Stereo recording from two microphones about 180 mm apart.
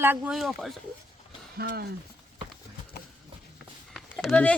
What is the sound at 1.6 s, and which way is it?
Speech, 60° right (ahead or behind).